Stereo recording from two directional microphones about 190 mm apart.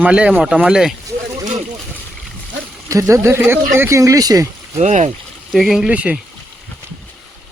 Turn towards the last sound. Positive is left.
turn(degrees=-5)  # may be behind; listen again after turning